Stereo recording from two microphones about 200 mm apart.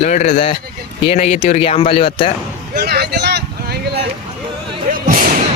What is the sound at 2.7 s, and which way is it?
Speech, 55° right (ahead or behind).